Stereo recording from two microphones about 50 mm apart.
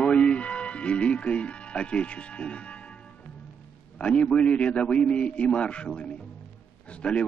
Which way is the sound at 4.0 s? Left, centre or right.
Left.